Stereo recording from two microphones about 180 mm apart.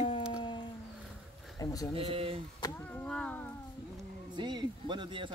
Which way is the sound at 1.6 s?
20° left (ahead or behind).